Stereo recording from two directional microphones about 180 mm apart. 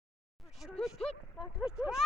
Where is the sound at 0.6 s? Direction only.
Centre (ahead or behind).